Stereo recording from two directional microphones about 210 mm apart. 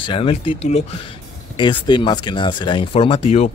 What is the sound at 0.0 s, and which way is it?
Speech, 25° left (ahead or behind).